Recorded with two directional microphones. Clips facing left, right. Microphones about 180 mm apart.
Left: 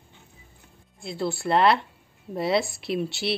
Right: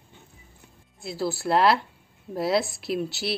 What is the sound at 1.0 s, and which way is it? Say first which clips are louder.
A woman's voice: even; centre (ahead or behind).